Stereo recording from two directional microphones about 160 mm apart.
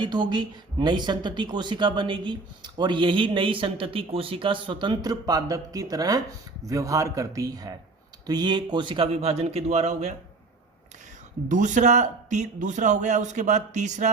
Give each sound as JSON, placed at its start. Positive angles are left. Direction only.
{"t": 0.0, "sound": "a woman's voice", "side_deg": -30}
{"t": 11.4, "sound": "speech", "side_deg": -50}